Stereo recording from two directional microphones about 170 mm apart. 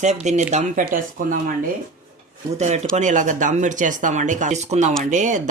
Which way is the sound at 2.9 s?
45° right (ahead or behind).